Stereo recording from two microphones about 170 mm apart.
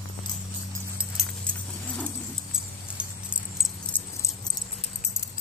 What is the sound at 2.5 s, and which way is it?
Keys jangling, 5° right (ahead or behind).